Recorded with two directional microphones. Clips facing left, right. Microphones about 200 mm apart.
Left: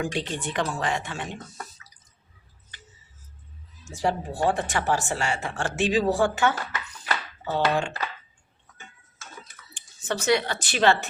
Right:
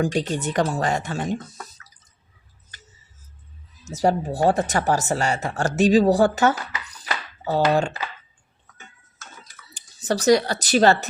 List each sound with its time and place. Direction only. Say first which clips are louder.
0.0 s speech: right 6 dB; 40° right (ahead or behind)
2.7 s music: even; 40° right (ahead or behind)
3.8 s speech: right 6 dB; 40° right (ahead or behind)
9.7 s speech: right 6 dB; 40° right (ahead or behind)